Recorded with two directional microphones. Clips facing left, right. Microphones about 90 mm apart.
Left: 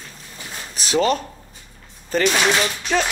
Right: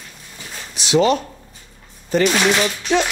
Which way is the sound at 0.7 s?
40° left (ahead or behind).